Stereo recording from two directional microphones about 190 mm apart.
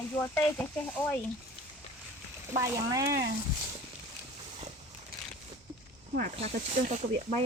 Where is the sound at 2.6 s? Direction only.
20° right (ahead or behind).